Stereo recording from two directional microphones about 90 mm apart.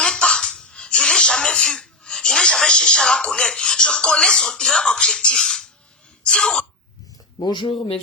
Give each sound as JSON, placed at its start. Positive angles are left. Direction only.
{"t": 0.0, "sound": "a sound", "side_deg": 10}
{"t": 6.2, "sound": "throat clearing", "side_deg": 10}
{"t": 7.3, "sound": "speech", "side_deg": 55}